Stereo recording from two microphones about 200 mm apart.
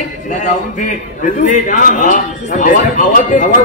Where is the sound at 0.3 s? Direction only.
40° left (ahead or behind).